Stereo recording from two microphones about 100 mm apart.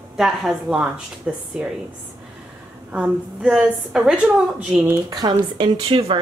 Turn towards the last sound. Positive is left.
turn(degrees=-70)  # may be behind; listen again after turning